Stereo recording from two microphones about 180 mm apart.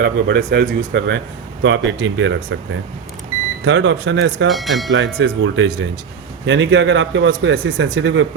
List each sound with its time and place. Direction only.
0.0 s speech: 65° right (ahead or behind)
1.6 s a man's voice: 90° right
3.6 s a man's voice: 90° right
4.4 s speech: centre (ahead or behind)
4.9 s a man's voice: 85° right
7.9 s a man's voice: 90° right